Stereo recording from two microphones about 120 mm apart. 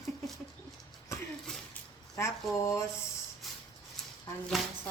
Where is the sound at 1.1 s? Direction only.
25° left (ahead or behind).